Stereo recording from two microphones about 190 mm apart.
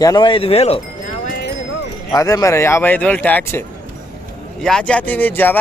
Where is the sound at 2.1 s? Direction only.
20° left (ahead or behind).